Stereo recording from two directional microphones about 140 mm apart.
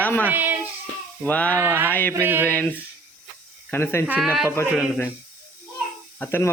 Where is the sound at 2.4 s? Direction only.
15° left (ahead or behind).